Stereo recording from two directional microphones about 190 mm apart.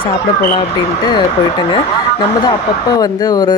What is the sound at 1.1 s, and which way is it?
Speech, 25° left (ahead or behind).